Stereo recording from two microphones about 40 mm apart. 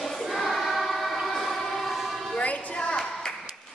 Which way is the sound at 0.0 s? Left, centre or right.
Centre.